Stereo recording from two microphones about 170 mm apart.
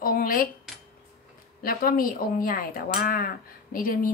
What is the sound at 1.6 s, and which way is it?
Speech, 55° left (ahead or behind).